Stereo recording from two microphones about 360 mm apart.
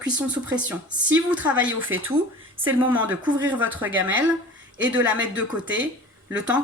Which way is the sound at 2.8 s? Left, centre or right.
Centre.